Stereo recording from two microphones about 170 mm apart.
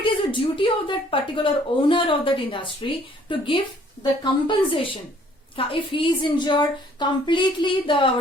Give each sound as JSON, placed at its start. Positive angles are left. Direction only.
{"t": 0.0, "sound": "a woman's voice", "side_deg": 30}